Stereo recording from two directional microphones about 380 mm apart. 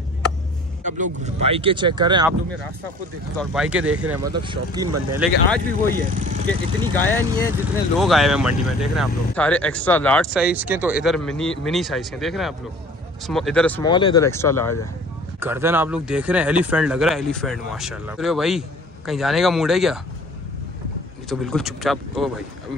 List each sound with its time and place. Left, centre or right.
0.8 s speech: centre
3.3 s speech: centre
5.1 s speech: centre
5.9 s speech: centre
7.0 s speech: centre
15.4 s speech: centre
21.3 s speech: centre